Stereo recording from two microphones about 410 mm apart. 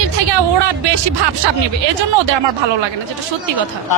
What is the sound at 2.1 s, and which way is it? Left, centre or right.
Speech, right.